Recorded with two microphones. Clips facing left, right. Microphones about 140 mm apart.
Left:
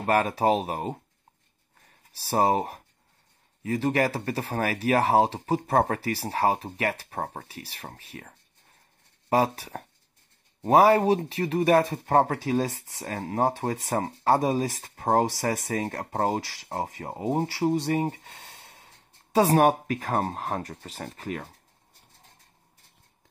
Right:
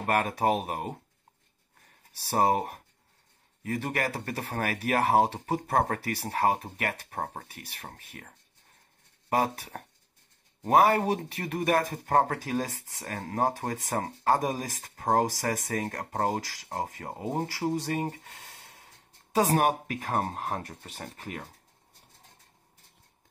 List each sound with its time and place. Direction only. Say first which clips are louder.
0.1 s speech: left 3 dB; 30° left (ahead or behind)
3.7 s speech: left 6 dB; 30° left (ahead or behind)
9.3 s speech: left 4 dB; 35° left (ahead or behind)
19.3 s speech: left 4 dB; 35° left (ahead or behind)